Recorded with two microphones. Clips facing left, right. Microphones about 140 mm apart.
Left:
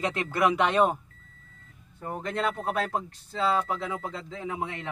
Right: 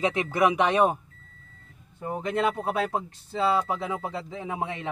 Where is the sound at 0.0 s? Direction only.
20° right (ahead or behind).